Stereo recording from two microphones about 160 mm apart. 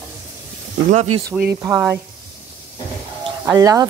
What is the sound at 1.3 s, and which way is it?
Speech, 10° right (ahead or behind).